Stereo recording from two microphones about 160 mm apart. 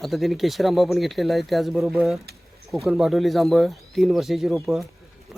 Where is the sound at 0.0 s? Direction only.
Centre (ahead or behind).